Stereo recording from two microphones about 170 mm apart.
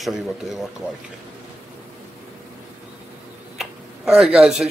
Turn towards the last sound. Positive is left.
turn(degrees=-5)  # may be behind; listen again after turning